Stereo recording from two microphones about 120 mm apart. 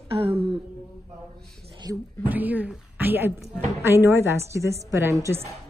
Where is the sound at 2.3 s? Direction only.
15° right (ahead or behind).